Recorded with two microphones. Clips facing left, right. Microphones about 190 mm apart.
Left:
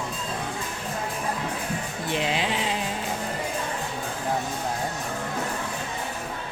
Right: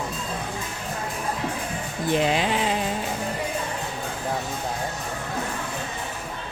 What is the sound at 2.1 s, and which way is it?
Speech, 45° right (ahead or behind).